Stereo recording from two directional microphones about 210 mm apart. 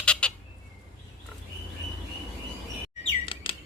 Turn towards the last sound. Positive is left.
turn(degrees=25)  # may be behind; listen again after turning